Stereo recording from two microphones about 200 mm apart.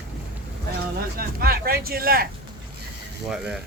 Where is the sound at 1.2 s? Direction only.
50° right (ahead or behind).